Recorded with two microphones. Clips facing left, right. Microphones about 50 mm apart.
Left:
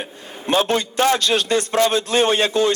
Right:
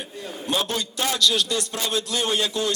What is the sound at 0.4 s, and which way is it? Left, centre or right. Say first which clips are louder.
A man's voice: left 7 dB; left.